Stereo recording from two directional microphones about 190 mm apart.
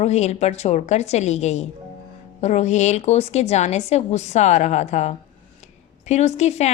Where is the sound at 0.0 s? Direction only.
35° left (ahead or behind).